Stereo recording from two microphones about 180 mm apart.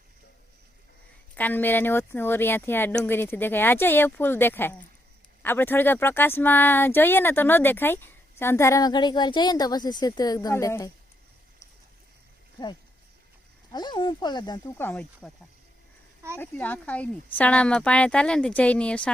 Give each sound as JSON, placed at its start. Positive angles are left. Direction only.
{"t": 1.4, "sound": "speech", "side_deg": 10}
{"t": 13.7, "sound": "speech", "side_deg": 25}
{"t": 14.8, "sound": "speech", "side_deg": 10}
{"t": 16.4, "sound": "speech", "side_deg": 10}